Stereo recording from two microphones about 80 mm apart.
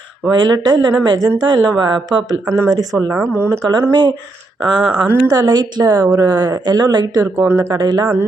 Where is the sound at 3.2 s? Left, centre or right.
Right.